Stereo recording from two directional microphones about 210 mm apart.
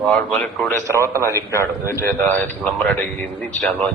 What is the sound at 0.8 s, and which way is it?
Speech, 15° right (ahead or behind).